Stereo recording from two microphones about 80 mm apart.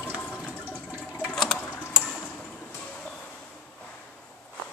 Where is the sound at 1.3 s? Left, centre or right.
Centre.